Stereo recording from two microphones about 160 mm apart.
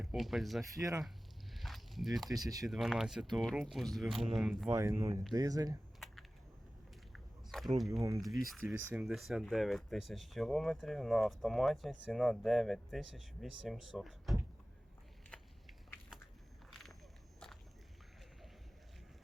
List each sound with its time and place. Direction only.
0.0 s speech: centre (ahead or behind)
0.8 s speech: 20° right (ahead or behind)
1.5 s walk: centre (ahead or behind)
2.3 s speech: 20° right (ahead or behind)
2.6 s speech: centre (ahead or behind)
4.7 s speech: 20° right (ahead or behind)
7.1 s a sound: centre (ahead or behind)
8.6 s speech: 10° right (ahead or behind)